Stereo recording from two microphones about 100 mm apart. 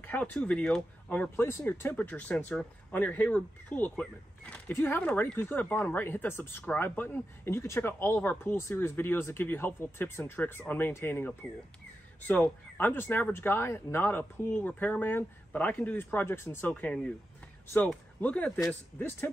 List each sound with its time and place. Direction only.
0.0 s speech: 15° left (ahead or behind)
1.3 s speech: 25° left (ahead or behind)
18.2 s speech: 10° left (ahead or behind)